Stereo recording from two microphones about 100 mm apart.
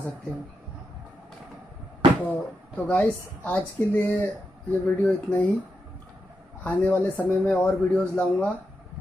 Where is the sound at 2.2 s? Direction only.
15° left (ahead or behind).